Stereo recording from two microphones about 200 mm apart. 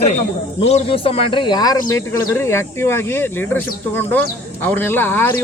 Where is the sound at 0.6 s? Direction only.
35° left (ahead or behind); by 5.2 s 10° left (ahead or behind).